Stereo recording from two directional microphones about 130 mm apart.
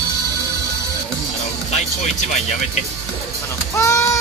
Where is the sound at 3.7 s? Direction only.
20° left (ahead or behind).